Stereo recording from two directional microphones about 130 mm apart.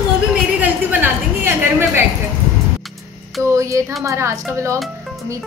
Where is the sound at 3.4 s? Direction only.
25° right (ahead or behind).